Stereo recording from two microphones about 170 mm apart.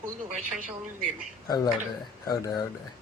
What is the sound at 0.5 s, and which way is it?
Speech, 50° right (ahead or behind).